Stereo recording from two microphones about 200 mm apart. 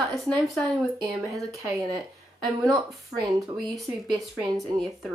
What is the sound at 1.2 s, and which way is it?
Speech, 15° right (ahead or behind).